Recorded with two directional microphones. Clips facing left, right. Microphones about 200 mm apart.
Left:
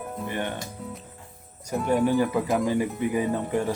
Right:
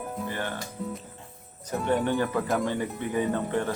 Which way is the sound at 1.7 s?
Centre (ahead or behind).